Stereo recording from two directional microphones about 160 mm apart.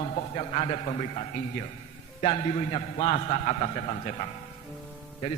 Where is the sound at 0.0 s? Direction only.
40° left (ahead or behind).